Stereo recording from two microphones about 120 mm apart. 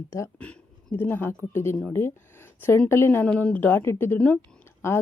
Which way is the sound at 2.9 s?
20° left (ahead or behind).